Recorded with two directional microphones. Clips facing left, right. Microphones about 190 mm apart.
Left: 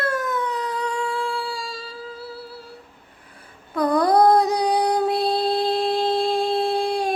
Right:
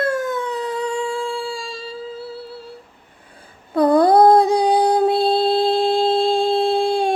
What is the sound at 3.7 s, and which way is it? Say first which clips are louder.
Music: right 5 dB; 30° right (ahead or behind).